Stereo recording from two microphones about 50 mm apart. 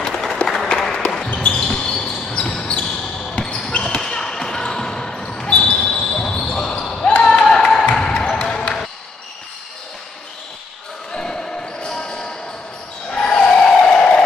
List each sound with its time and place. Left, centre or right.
0.0 s applause: centre
1.5 s basketball bounce: centre
7.4 s music: centre
8.3 s basketball bounce: centre
11.1 s basketball bounce: centre
13.1 s a sound: centre